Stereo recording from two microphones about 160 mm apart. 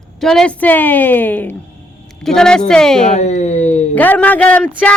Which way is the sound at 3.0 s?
45° left (ahead or behind).